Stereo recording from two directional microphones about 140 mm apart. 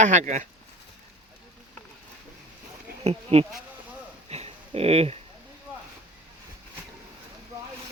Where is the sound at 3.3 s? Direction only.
50° right (ahead or behind).